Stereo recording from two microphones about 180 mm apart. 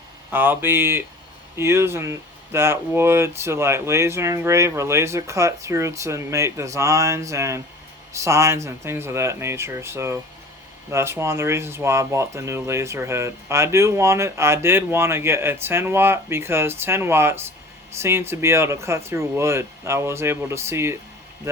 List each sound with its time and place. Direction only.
0.3 s speech: 10° right (ahead or behind)